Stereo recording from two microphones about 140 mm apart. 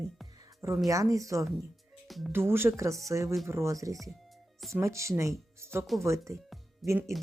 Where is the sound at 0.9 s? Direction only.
25° right (ahead or behind).